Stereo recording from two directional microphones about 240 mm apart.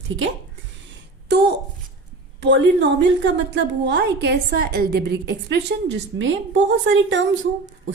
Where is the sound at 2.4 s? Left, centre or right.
Right.